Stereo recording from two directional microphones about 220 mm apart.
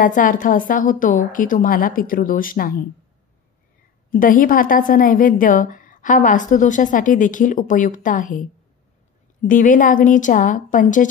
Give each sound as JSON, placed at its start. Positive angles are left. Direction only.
{"t": 0.0, "sound": "a woman's voice", "side_deg": 35}
{"t": 4.1, "sound": "a woman's voice", "side_deg": 40}